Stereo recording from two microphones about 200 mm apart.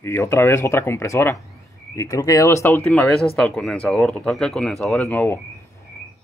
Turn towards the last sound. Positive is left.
turn(degrees=10)  # may be behind; listen again after turning